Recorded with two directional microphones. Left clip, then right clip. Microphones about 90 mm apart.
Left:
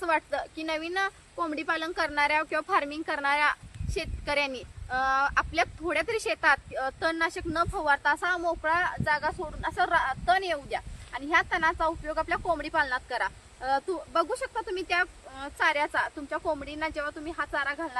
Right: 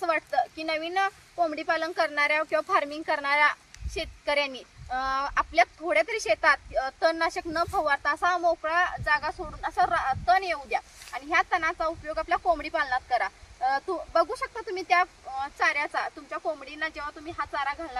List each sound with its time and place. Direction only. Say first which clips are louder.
0.0 s a woman's voice: right 2 dB; 30° left (ahead or behind); by 17.7 s 15° left (ahead or behind)